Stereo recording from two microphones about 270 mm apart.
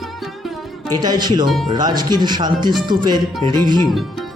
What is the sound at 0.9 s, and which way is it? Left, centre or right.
Speech, centre.